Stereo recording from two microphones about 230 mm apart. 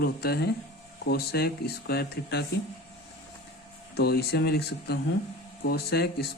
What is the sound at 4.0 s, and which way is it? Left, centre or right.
Speech, left.